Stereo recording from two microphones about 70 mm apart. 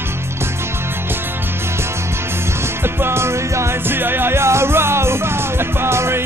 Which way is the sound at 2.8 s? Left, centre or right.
Right.